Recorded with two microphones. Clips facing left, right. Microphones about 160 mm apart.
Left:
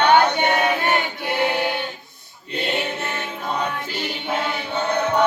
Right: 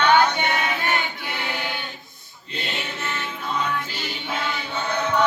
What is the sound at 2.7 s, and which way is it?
Music, 55° left (ahead or behind).